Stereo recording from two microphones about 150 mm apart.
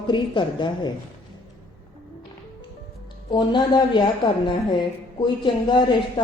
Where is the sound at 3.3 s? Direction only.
30° left (ahead or behind).